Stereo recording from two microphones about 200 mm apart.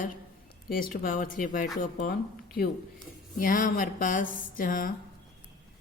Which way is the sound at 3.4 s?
45° left (ahead or behind).